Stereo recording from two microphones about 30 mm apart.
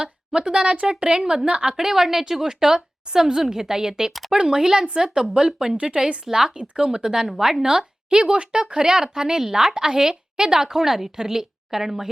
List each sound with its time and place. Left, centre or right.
0.0 s speech: right
1.5 s speech: right
1.7 s a woman's voice: centre; by 6.2 s right
6.2 s speech: centre
9.7 s a woman's voice: right